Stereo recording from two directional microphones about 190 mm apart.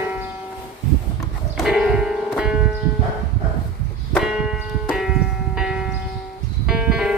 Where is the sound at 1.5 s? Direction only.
Centre (ahead or behind).